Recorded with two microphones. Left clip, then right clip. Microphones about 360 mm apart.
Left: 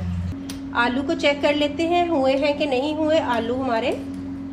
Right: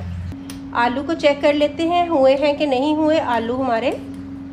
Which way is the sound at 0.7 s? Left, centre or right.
Right.